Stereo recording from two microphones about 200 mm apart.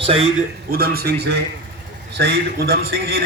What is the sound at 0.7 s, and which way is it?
A man's voice, 50° right (ahead or behind).